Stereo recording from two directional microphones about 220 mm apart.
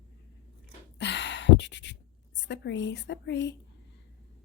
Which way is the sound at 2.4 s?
50° left (ahead or behind).